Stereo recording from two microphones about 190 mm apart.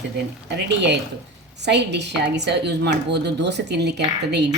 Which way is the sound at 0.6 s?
65° right (ahead or behind).